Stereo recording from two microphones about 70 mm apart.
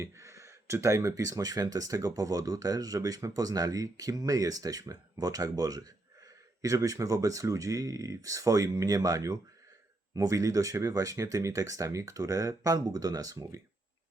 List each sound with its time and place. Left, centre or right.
0.0 s speech: right